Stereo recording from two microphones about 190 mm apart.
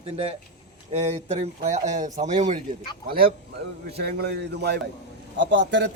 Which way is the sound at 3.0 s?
50° right (ahead or behind).